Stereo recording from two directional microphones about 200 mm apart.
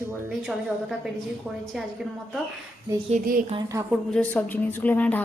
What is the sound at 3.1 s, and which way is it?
Speech, 45° right (ahead or behind).